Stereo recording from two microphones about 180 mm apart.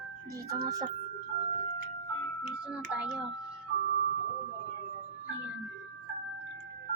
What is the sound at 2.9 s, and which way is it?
Speech, 5° right (ahead or behind).